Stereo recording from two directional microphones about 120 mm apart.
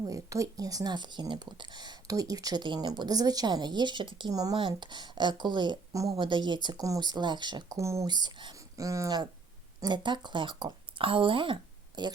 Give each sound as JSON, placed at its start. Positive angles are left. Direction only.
{"t": 0.0, "sound": "speech", "side_deg": -30}
{"t": 4.5, "sound": "speech", "side_deg": -40}
{"t": 7.8, "sound": "speech", "side_deg": -25}
{"t": 8.1, "sound": "speech", "side_deg": -35}